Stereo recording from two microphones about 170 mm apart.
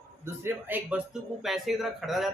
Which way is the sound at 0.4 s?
10° right (ahead or behind).